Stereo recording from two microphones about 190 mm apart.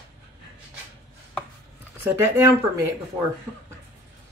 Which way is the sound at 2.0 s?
15° right (ahead or behind).